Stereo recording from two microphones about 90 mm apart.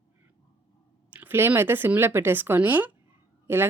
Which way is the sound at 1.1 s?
20° right (ahead or behind).